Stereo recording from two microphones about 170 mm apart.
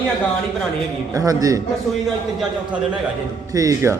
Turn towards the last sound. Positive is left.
turn(degrees=-20)  # may be behind; listen again after turning